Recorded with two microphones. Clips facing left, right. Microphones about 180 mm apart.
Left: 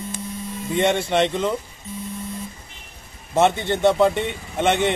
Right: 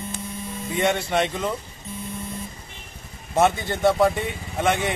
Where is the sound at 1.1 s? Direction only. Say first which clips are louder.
Left 3 dB; 25° left (ahead or behind).